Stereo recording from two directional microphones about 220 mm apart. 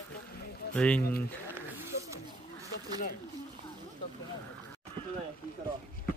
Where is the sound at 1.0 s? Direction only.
45° left (ahead or behind).